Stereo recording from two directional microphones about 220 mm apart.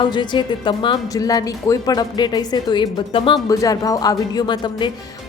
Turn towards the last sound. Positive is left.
turn(degrees=20)  # may be behind; listen again after turning